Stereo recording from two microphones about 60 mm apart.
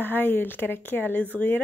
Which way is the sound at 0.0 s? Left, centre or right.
Left.